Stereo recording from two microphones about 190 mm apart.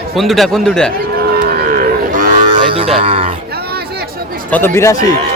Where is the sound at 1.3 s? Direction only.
50° right (ahead or behind).